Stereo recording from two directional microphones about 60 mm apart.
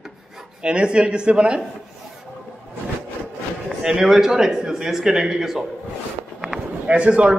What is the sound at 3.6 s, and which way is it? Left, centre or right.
A man's voice, centre.